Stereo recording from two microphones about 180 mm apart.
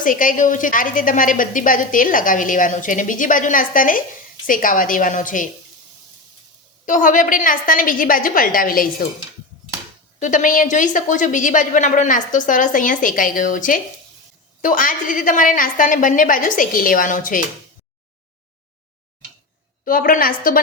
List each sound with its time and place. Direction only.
0.0 s a woman's voice: 50° left (ahead or behind)
6.8 s a woman's voice: 45° left (ahead or behind)
10.2 s a woman's voice: 45° left (ahead or behind)
19.8 s a woman's voice: 50° left (ahead or behind)